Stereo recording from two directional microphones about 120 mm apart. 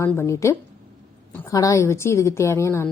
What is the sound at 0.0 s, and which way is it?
A woman's voice, 25° left (ahead or behind).